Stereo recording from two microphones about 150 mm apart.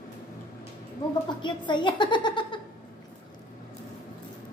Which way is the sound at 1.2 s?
30° left (ahead or behind).